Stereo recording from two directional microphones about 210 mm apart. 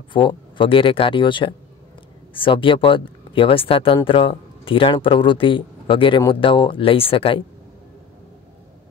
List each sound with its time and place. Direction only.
0.1 s speech: 25° left (ahead or behind)